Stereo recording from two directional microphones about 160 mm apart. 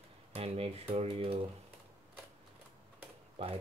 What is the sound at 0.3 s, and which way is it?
Speech, 40° right (ahead or behind).